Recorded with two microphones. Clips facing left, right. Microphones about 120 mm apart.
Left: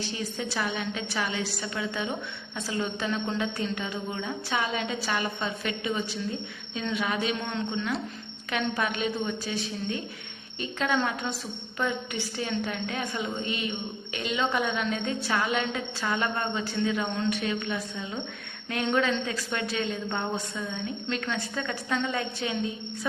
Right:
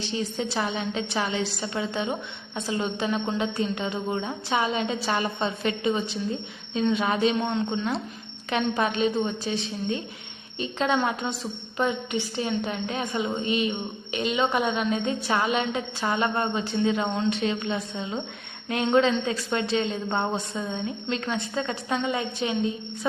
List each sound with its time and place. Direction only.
0.0 s a woman's voice: 25° right (ahead or behind)
8.4 s a woman's voice: 25° right (ahead or behind)